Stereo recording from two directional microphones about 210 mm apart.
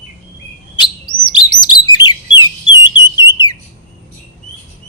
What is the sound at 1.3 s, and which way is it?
Chirp, 20° left (ahead or behind).